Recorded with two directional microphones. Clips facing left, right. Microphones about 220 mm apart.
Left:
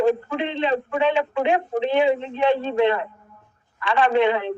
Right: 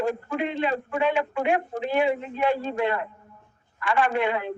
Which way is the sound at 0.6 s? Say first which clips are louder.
Left 7 dB; 90° left.